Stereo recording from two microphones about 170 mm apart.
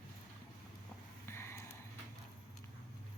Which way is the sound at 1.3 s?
15° left (ahead or behind).